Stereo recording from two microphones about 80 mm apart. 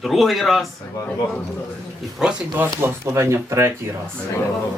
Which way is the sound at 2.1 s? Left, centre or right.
Centre.